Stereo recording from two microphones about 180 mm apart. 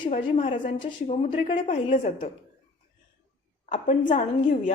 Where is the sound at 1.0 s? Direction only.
40° left (ahead or behind).